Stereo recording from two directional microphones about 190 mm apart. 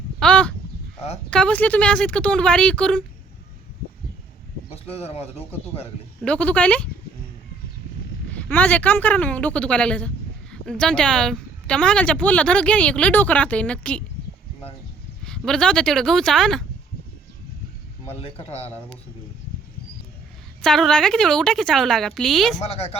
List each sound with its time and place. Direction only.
0.2 s a sound: 5° left (ahead or behind)
1.3 s a woman's voice: 5° left (ahead or behind)
4.7 s speech: 30° left (ahead or behind)
6.2 s a woman's voice: 5° left (ahead or behind)
8.3 s a woman's voice: 5° left (ahead or behind)
15.2 s a woman's voice: 5° left (ahead or behind)
18.2 s speech: 30° left (ahead or behind)
20.6 s a woman's voice: centre (ahead or behind)
22.6 s speech: 30° left (ahead or behind)